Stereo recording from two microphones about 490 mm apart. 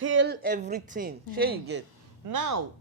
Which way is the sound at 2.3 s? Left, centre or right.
Right.